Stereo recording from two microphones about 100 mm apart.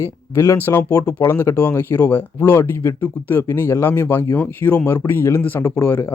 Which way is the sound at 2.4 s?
30° left (ahead or behind).